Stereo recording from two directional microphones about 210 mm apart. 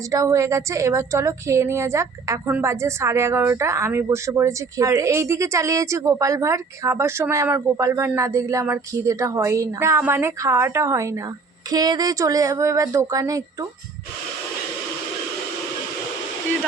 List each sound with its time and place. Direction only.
0.1 s a woman's voice: 15° right (ahead or behind)